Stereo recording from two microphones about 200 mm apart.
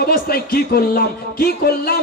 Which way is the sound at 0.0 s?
50° left (ahead or behind).